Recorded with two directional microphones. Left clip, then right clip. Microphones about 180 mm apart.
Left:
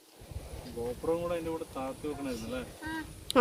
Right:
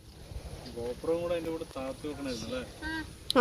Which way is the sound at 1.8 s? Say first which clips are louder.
Left 1 dB; 40° left (ahead or behind).